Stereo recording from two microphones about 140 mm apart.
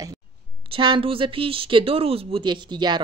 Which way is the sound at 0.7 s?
35° right (ahead or behind).